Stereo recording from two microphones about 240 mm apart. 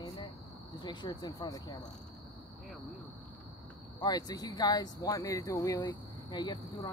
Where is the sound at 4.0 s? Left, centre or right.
Centre.